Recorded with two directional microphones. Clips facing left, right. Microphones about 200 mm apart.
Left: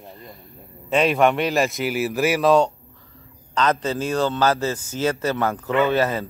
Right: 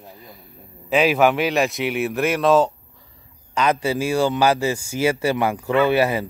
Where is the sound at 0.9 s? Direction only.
Centre (ahead or behind).